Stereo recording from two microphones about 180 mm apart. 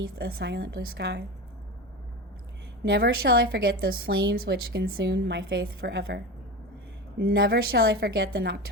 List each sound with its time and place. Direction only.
0.2 s a woman's voice: 60° right (ahead or behind)
2.9 s a woman's voice: 60° right (ahead or behind)
7.2 s a woman's voice: 60° right (ahead or behind)